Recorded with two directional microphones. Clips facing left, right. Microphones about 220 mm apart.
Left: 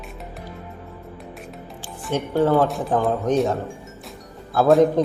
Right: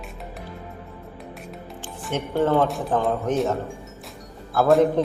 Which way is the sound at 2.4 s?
Centre (ahead or behind).